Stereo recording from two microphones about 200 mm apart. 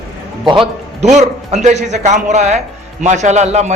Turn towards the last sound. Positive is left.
turn(degrees=-35)  # may be behind; listen again after turning